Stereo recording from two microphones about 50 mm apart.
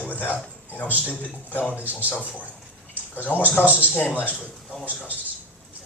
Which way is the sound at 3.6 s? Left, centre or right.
Right.